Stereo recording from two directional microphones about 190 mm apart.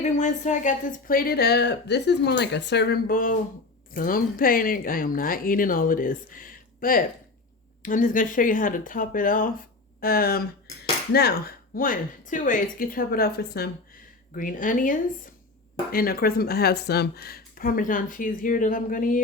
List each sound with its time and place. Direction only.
0.0 s a woman's voice: 40° left (ahead or behind); by 13.7 s 55° left (ahead or behind)
14.3 s speech: 45° left (ahead or behind)